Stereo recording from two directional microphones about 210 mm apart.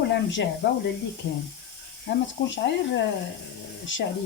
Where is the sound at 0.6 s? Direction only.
55° left (ahead or behind).